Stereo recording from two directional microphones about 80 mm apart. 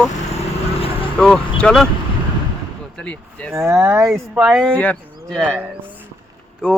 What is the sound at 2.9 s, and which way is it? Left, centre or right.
Speech, centre.